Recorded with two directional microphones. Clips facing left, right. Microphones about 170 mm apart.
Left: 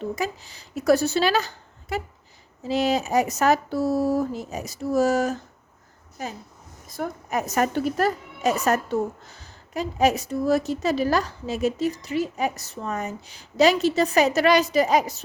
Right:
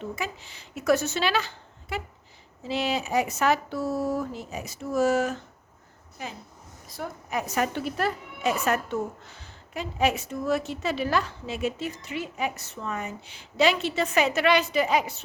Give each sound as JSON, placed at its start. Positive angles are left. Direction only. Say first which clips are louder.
{"t": 0.2, "sound": "a woman's voice", "louder": "left 5 dB", "side_deg": 40}